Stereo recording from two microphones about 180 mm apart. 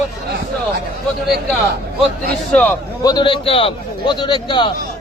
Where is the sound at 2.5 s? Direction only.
5° left (ahead or behind).